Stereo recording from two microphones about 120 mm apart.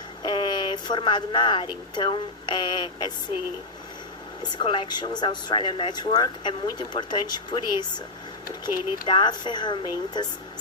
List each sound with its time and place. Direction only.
0.2 s speech: 40° left (ahead or behind)
4.5 s a woman's voice: 45° left (ahead or behind)
9.0 s a woman's voice: 40° left (ahead or behind)